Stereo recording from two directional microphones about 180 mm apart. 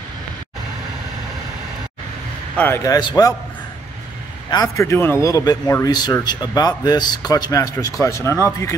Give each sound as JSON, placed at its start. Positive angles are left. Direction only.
{"t": 2.5, "sound": "speech", "side_deg": 10}
{"t": 4.5, "sound": "speech", "side_deg": 20}